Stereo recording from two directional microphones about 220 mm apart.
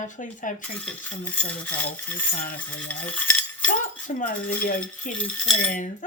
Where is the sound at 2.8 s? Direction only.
5° left (ahead or behind).